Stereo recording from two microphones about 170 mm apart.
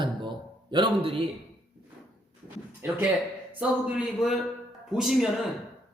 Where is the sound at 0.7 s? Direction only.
30° right (ahead or behind).